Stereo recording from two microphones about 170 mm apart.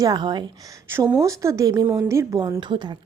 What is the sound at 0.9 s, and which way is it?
A woman's voice, 10° right (ahead or behind).